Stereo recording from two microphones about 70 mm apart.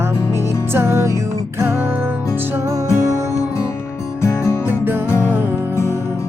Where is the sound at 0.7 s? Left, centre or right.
Right.